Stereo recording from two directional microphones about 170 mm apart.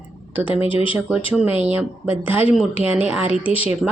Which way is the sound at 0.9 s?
10° right (ahead or behind).